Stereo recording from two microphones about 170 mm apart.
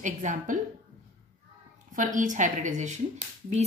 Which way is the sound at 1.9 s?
50° right (ahead or behind).